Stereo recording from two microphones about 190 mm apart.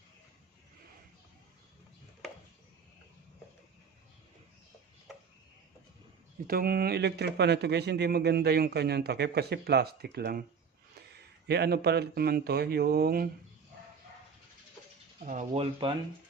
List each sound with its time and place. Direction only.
6.5 s speech: 50° right (ahead or behind)
11.4 s speech: 60° right (ahead or behind)
15.2 s speech: 40° right (ahead or behind)
15.8 s speech: 30° right (ahead or behind)